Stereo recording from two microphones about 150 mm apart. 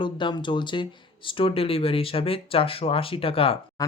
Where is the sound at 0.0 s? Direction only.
30° left (ahead or behind).